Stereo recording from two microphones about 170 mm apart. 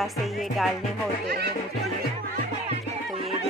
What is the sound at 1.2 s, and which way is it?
Speech, 75° right (ahead or behind).